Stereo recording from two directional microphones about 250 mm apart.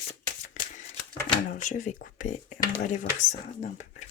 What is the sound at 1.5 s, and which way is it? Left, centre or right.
Speech, left.